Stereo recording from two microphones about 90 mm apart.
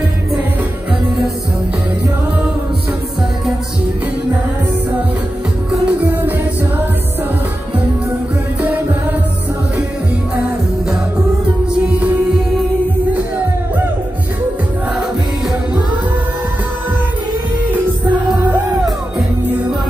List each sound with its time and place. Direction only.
5.7 s music: 15° right (ahead or behind)
8.5 s music: 20° right (ahead or behind)
11.9 s music: 15° right (ahead or behind)